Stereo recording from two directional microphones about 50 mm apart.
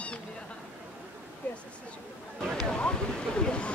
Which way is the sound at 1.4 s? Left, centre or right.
Left.